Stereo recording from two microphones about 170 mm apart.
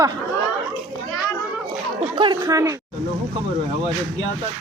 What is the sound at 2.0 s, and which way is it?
Speech, 30° right (ahead or behind).